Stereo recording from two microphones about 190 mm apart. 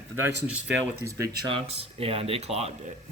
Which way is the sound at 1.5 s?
30° right (ahead or behind).